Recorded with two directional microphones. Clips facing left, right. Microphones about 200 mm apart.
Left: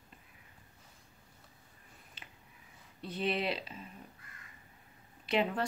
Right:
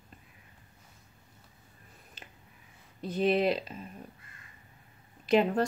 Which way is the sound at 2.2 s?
45° right (ahead or behind).